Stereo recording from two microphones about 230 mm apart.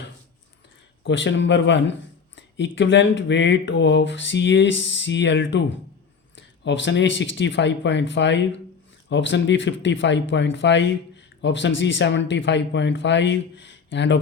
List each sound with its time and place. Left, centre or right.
1.0 s speech: left